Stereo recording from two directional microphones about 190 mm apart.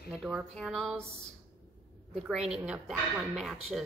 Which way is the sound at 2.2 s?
5° right (ahead or behind).